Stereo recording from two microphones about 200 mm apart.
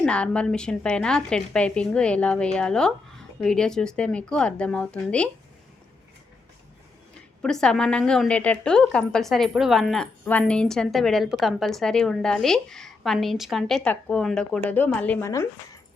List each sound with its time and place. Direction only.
0.0 s a woman's voice: 5° left (ahead or behind)
7.4 s a woman's voice: 5° left (ahead or behind)